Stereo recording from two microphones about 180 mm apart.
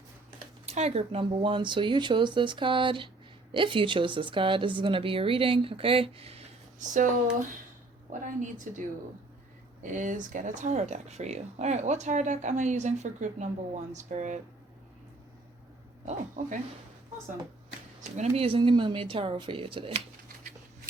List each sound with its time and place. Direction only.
0.6 s a woman's voice: 35° right (ahead or behind)
8.2 s speech: 45° right (ahead or behind)
9.8 s speech: 45° right (ahead or behind)
16.0 s speech: 45° right (ahead or behind)
18.2 s a woman's voice: 30° right (ahead or behind)